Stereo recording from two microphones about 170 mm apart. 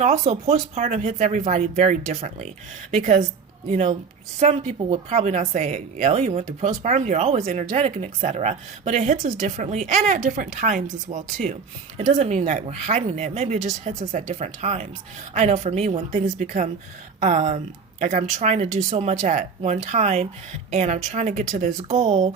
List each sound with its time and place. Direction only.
0.0 s speech: 40° right (ahead or behind)
3.7 s speech: 45° right (ahead or behind)